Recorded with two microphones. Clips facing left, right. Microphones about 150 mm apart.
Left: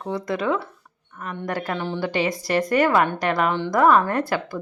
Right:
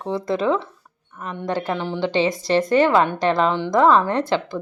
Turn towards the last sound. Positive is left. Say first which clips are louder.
# right 3 dB
turn(degrees=-20)  # may be behind; listen again after turning